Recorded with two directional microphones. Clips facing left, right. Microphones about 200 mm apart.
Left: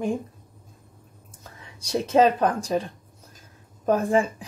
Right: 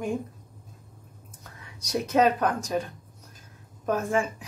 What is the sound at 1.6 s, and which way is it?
Speech, 30° left (ahead or behind).